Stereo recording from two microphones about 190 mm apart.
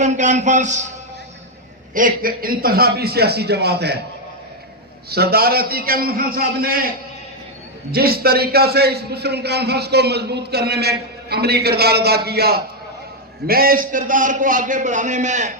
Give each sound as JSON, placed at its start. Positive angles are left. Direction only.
{"t": 0.0, "sound": "a man's voice", "side_deg": -40}
{"t": 1.9, "sound": "a man's voice", "side_deg": -45}
{"t": 5.1, "sound": "a man's voice", "side_deg": -55}
{"t": 7.9, "sound": "a man's voice", "side_deg": -55}